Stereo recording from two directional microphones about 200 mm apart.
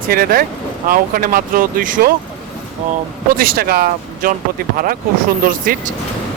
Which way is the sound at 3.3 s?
50° right (ahead or behind).